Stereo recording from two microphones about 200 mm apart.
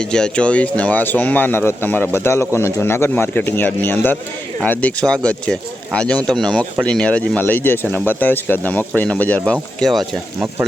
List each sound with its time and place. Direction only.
0.0 s speech: 5° left (ahead or behind)